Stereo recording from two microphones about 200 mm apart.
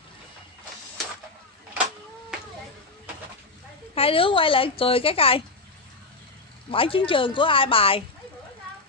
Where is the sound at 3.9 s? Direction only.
25° left (ahead or behind).